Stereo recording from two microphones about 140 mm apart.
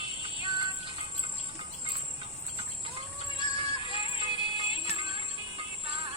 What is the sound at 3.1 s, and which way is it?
Music, 40° right (ahead or behind).